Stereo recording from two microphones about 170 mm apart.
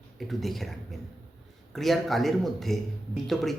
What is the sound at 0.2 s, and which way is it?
Speech, centre (ahead or behind).